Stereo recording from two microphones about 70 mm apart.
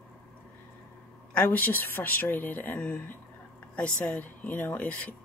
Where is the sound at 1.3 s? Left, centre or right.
Left.